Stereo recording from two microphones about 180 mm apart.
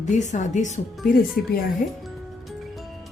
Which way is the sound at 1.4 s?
55° left (ahead or behind).